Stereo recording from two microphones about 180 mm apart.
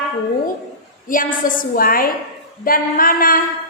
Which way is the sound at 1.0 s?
50° left (ahead or behind).